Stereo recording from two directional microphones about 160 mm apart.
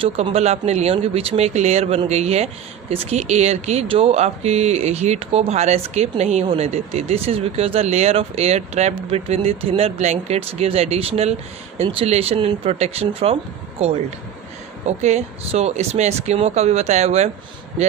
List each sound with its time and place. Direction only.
0.0 s speech: 40° right (ahead or behind)